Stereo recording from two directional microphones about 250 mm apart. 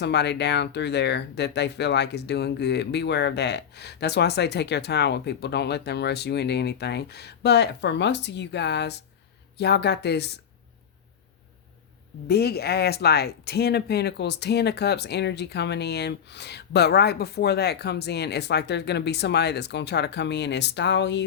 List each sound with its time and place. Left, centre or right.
0.0 s speech: left
12.3 s speech: left